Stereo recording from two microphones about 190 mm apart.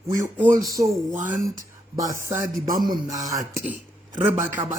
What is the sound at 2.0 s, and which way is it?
Speech, 15° right (ahead or behind).